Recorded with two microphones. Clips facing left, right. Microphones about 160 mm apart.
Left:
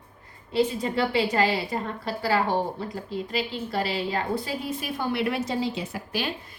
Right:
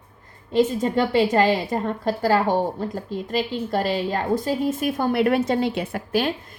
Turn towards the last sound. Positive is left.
turn(degrees=-55)  # may be behind; listen again after turning